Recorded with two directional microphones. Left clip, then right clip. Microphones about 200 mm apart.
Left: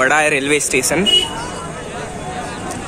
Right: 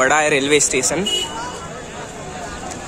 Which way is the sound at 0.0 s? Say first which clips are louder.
Left 1 dB; 10° right (ahead or behind).